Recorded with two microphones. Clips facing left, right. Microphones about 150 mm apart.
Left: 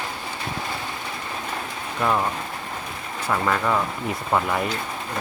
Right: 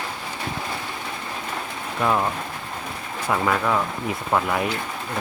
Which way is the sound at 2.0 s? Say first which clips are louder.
Right 1 dB; 5° right (ahead or behind).